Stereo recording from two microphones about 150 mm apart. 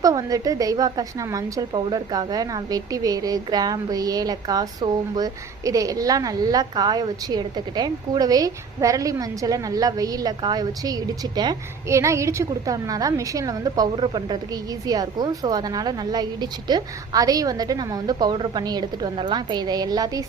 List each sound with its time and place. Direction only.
0.0 s a woman's voice: 25° right (ahead or behind)